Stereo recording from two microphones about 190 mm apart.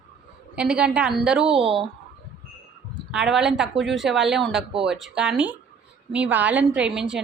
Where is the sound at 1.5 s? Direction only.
30° right (ahead or behind).